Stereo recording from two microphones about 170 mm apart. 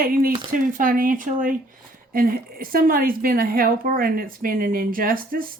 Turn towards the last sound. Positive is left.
turn(degrees=-55)  # may be behind; listen again after turning